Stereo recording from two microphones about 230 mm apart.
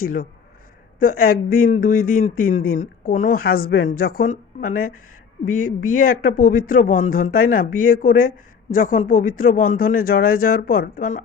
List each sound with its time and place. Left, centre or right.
0.0 s speech: left